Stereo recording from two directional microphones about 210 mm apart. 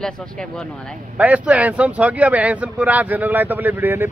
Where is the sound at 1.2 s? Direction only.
5° right (ahead or behind).